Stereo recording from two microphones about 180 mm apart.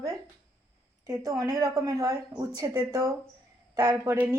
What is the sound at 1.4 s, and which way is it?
Speech, 20° right (ahead or behind).